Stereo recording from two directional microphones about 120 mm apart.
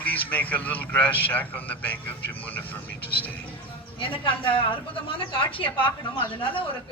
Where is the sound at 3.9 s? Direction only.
45° left (ahead or behind).